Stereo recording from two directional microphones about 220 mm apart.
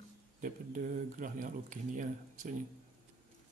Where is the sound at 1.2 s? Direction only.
35° right (ahead or behind).